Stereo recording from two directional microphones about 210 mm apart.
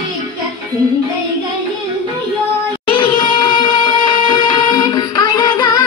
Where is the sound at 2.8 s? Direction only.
25° left (ahead or behind).